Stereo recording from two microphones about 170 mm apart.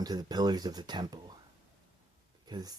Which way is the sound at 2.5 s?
25° right (ahead or behind).